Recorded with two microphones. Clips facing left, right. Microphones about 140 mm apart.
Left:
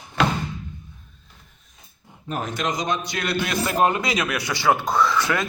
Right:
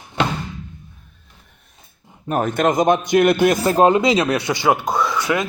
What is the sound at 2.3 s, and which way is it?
A man's voice, 55° right (ahead or behind).